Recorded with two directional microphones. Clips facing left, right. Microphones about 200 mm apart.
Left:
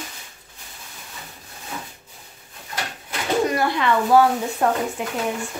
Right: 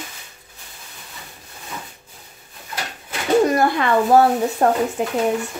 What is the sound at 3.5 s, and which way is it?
Speech, 45° right (ahead or behind).